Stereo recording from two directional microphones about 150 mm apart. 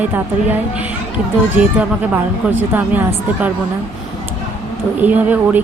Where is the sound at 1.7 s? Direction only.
10° right (ahead or behind).